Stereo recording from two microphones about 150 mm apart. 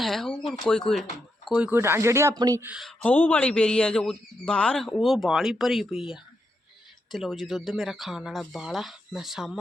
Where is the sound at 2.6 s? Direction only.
5° right (ahead or behind).